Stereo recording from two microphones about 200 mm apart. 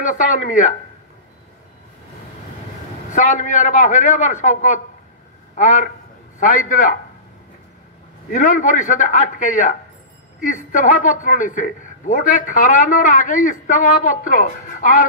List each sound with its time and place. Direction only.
0.0 s a man's voice: 40° left (ahead or behind)
3.1 s a man's voice: 40° left (ahead or behind)
8.3 s a man's voice: 40° left (ahead or behind)